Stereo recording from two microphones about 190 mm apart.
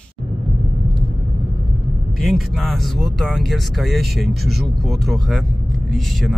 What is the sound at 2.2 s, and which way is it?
Speech, centre (ahead or behind).